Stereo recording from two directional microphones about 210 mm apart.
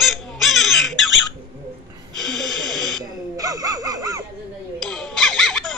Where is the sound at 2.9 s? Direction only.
15° right (ahead or behind).